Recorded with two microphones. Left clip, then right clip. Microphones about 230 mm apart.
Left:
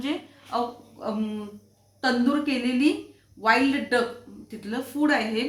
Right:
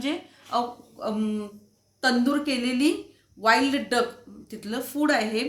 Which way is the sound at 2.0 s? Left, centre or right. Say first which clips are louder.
Even; right.